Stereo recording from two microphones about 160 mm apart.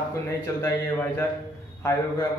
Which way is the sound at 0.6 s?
15° left (ahead or behind).